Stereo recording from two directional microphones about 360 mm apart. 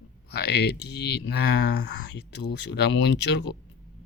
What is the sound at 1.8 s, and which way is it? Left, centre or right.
Speech, left.